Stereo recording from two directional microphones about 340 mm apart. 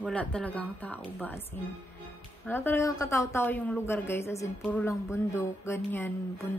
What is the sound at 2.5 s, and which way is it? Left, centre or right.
A woman's voice, centre.